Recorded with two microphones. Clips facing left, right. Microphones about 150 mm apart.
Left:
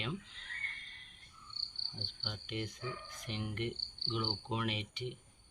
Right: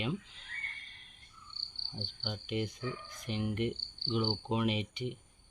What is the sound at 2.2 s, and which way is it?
Speech, 15° right (ahead or behind).